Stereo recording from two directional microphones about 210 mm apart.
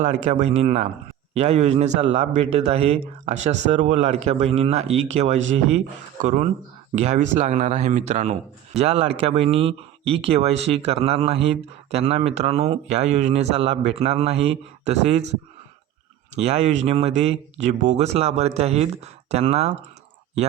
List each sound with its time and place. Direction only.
0.0 s speech: 30° right (ahead or behind)
16.3 s speech: 30° right (ahead or behind)